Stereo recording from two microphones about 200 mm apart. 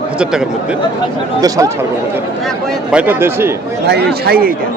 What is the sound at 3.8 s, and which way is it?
Speech, 55° right (ahead or behind).